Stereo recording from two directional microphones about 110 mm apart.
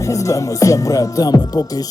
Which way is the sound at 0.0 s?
30° left (ahead or behind).